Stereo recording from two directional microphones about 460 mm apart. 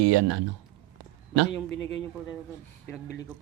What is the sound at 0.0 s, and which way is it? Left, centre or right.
Speech, right.